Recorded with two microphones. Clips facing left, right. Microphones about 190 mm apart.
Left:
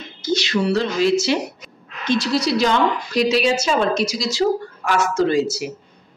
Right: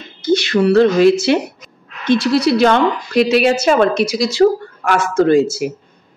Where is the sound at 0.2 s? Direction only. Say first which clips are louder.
Right 6 dB; 55° right (ahead or behind).